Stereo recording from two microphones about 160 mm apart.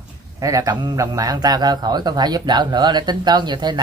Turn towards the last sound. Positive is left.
turn(degrees=-25)  # may be behind; listen again after turning